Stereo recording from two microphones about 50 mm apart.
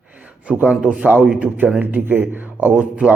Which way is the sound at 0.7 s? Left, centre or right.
Right.